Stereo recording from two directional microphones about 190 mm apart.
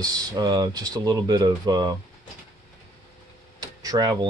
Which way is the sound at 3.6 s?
20° right (ahead or behind).